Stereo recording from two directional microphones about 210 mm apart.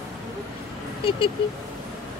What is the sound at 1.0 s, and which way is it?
Speech, 25° left (ahead or behind).